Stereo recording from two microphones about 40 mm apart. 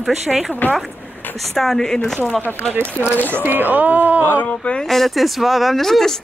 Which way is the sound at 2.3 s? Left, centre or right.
Left.